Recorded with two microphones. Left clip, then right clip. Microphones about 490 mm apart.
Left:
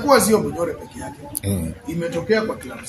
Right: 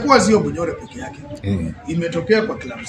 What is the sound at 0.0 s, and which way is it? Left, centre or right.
Speech, left.